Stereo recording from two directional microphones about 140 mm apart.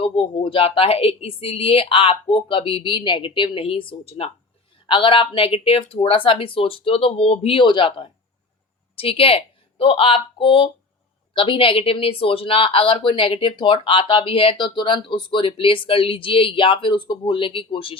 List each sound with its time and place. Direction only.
0.0 s speech: 35° left (ahead or behind)